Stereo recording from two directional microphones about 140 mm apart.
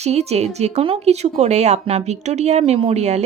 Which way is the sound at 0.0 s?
50° right (ahead or behind).